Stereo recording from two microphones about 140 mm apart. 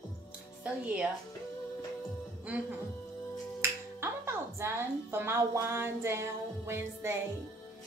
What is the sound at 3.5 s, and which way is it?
Finger snapping, 20° right (ahead or behind).